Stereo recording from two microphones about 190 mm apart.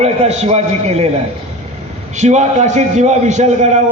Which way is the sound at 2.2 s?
35° right (ahead or behind).